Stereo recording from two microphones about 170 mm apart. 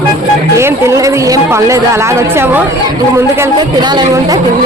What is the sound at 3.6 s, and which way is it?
Speech, 25° right (ahead or behind).